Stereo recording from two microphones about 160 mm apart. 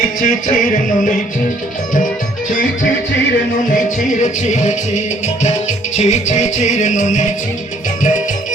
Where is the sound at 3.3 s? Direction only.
55° left (ahead or behind).